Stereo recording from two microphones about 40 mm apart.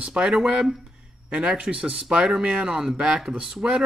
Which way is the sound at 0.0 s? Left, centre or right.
Right.